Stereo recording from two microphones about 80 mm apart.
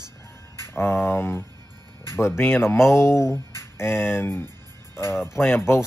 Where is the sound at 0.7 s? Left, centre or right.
Left.